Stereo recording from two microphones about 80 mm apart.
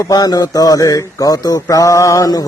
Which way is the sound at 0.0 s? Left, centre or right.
Left.